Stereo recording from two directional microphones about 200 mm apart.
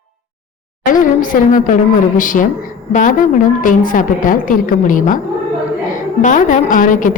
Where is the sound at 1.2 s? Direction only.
40° left (ahead or behind).